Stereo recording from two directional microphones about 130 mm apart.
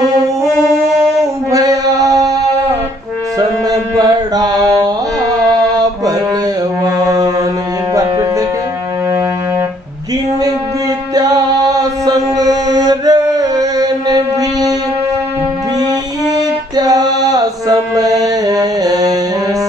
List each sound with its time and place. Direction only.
1.5 s mantra: 30° right (ahead or behind)
4.4 s mantra: 30° right (ahead or behind)
7.1 s a sound: 25° right (ahead or behind)
7.9 s music: 25° right (ahead or behind)
11.1 s music: 30° right (ahead or behind)
12.4 s mantra: 30° right (ahead or behind)
16.7 s mantra: 30° right (ahead or behind)